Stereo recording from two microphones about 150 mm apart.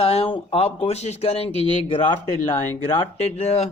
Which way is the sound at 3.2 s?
45° left (ahead or behind).